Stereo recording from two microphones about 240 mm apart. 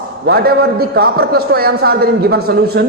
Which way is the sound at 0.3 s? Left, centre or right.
Right.